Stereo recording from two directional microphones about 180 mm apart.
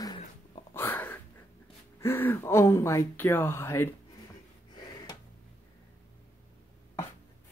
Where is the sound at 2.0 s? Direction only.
10° left (ahead or behind).